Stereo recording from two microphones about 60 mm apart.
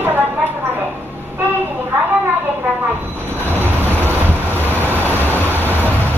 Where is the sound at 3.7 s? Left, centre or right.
Right.